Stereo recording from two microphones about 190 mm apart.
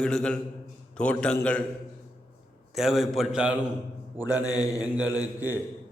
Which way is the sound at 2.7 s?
Centre (ahead or behind).